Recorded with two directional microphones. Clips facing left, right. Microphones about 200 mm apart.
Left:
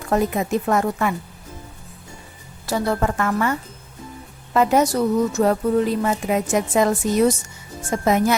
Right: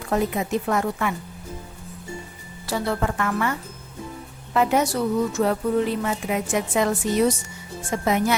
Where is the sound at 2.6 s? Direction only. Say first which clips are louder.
Left 3 dB; 45° left (ahead or behind).